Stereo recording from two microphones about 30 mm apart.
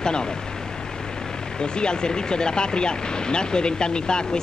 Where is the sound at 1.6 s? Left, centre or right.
Left.